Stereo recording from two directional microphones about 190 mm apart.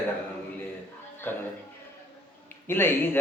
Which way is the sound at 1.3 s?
10° left (ahead or behind).